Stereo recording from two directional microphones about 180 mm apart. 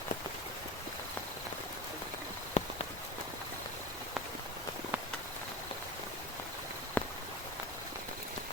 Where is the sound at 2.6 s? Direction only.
40° left (ahead or behind).